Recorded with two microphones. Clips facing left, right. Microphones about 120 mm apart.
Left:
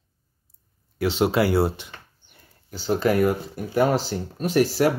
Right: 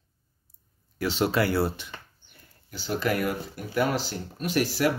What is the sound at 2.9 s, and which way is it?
Speech, 35° left (ahead or behind).